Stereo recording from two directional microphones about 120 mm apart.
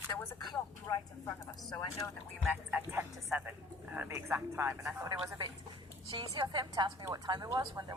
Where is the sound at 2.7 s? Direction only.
15° right (ahead or behind).